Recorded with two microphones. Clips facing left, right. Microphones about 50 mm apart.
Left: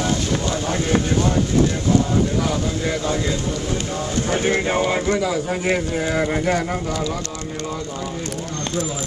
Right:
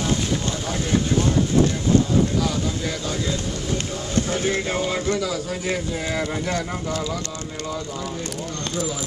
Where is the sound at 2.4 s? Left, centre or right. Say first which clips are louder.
Left 3 dB; left.